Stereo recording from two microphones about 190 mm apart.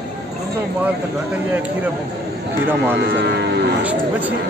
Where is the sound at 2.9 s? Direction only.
60° right (ahead or behind).